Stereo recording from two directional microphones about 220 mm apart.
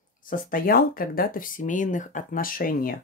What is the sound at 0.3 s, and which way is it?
Speech, 40° left (ahead or behind).